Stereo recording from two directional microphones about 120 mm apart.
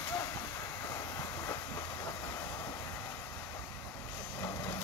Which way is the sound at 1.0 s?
25° left (ahead or behind).